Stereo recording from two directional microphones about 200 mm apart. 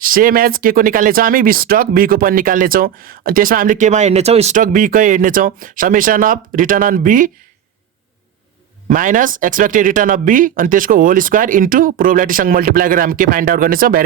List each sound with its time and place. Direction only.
0.1 s speech: 45° right (ahead or behind)
8.9 s speech: 40° right (ahead or behind)